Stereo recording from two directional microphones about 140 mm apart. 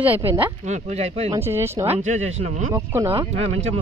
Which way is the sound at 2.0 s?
55° right (ahead or behind).